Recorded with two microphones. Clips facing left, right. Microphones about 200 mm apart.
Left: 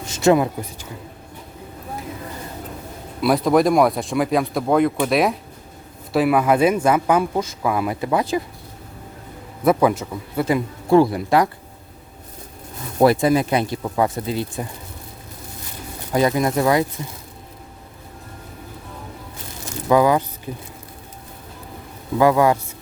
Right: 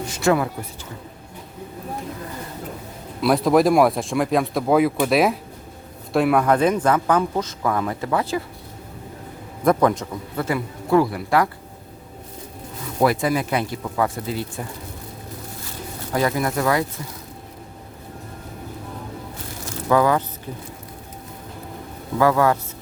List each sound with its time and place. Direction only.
0.1 s a sound: 20° left (ahead or behind)
3.2 s speech: centre (ahead or behind)
9.6 s speech: 5° left (ahead or behind); by 11.4 s 25° left (ahead or behind)
13.0 s speech: 30° left (ahead or behind)
16.1 s speech: 20° left (ahead or behind)
19.9 s speech: 15° left (ahead or behind)
22.2 s speech: 15° left (ahead or behind)